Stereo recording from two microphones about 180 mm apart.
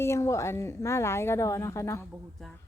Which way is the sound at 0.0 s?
15° left (ahead or behind).